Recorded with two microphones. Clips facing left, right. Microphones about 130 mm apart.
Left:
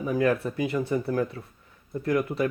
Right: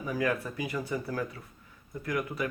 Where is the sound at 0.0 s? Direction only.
25° left (ahead or behind).